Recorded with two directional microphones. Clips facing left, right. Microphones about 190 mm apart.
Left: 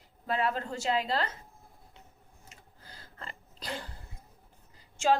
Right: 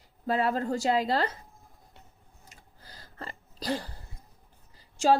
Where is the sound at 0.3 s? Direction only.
35° right (ahead or behind).